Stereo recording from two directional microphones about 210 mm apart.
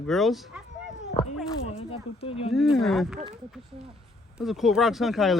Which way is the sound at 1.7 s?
30° left (ahead or behind).